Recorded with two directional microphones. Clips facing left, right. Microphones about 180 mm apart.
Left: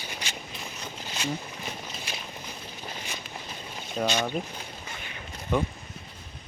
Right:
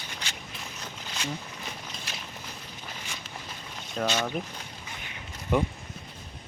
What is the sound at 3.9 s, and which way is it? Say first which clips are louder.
Speech: left 1 dB; 15° left (ahead or behind).